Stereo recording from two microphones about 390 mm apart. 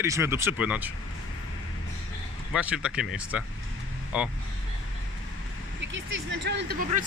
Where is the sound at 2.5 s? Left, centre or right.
Centre.